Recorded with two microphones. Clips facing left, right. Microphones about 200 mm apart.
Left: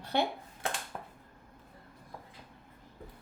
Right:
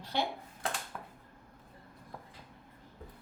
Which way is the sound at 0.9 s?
30° left (ahead or behind).